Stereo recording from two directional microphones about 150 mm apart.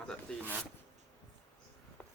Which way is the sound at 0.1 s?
5° left (ahead or behind).